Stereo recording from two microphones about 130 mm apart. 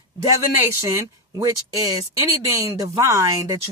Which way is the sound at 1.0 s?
25° right (ahead or behind).